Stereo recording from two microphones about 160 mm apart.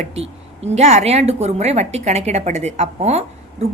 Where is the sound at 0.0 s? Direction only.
40° right (ahead or behind).